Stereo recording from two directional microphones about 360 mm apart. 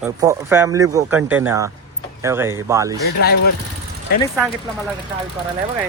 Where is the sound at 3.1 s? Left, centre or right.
Left.